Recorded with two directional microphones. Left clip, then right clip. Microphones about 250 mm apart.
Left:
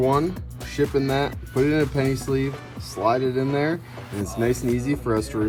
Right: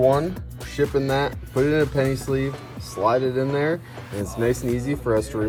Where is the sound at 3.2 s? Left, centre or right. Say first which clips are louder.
Right 1 dB; left.